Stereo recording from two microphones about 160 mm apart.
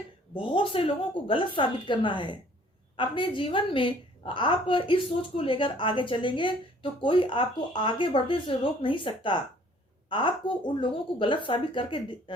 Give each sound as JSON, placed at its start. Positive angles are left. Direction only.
{"t": 0.3, "sound": "speech", "side_deg": 30}